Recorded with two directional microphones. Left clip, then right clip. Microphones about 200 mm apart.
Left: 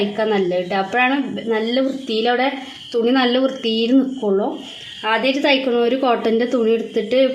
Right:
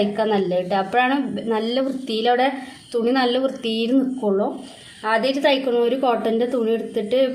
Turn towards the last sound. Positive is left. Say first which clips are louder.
# left 3 dB
turn(degrees=30)  # may be behind; listen again after turning